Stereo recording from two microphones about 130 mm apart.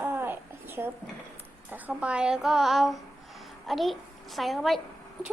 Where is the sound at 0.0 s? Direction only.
15° right (ahead or behind).